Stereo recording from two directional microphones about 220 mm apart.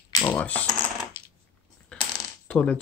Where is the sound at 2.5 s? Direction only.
5° left (ahead or behind).